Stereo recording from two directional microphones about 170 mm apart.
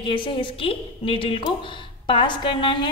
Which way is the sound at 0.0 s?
30° left (ahead or behind).